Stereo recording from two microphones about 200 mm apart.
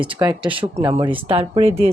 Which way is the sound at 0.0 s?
25° right (ahead or behind).